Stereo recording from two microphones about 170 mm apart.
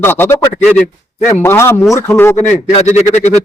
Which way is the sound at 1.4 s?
15° left (ahead or behind).